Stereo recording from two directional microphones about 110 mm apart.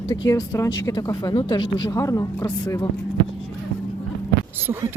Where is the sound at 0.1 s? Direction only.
30° left (ahead or behind).